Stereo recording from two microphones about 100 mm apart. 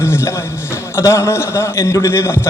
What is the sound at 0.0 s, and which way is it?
A man's voice, 25° left (ahead or behind).